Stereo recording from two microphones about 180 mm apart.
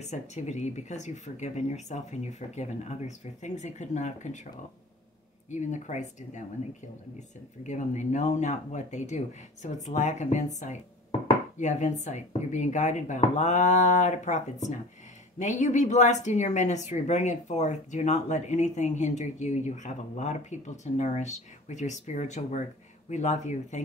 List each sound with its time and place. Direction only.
0.0 s speech: 40° left (ahead or behind)
5.5 s speech: 40° left (ahead or behind)
7.6 s speech: 40° left (ahead or behind)